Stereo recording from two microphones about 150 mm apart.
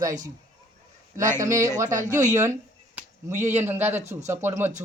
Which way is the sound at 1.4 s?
20° right (ahead or behind).